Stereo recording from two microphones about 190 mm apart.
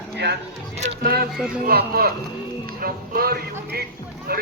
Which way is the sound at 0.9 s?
55° right (ahead or behind).